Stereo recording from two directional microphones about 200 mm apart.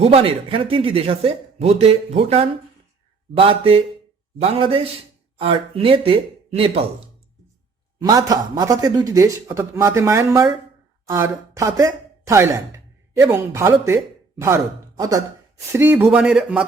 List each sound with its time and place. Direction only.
0.0 s speech: 30° right (ahead or behind)
7.9 s speech: 20° right (ahead or behind)